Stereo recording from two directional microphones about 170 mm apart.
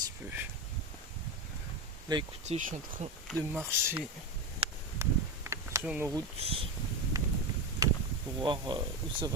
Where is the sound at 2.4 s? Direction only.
45° right (ahead or behind).